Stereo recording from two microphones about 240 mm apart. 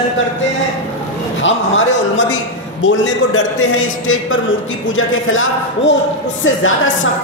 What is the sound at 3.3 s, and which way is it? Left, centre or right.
A man's voice, left.